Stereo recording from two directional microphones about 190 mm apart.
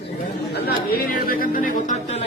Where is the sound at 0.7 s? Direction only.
50° left (ahead or behind).